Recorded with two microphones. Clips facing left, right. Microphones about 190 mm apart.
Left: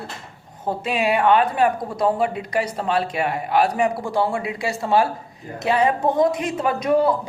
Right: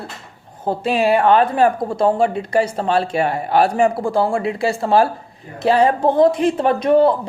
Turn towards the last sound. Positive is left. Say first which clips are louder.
# right 5 dB
turn(degrees=-30)  # may be behind; listen again after turning